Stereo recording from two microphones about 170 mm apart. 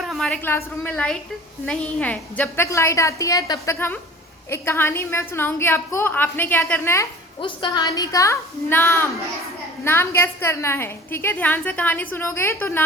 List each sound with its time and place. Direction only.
0.0 s a woman's voice: centre (ahead or behind)
7.4 s a woman's voice: 25° left (ahead or behind)